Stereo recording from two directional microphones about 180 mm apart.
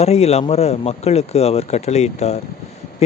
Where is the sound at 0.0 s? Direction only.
35° left (ahead or behind).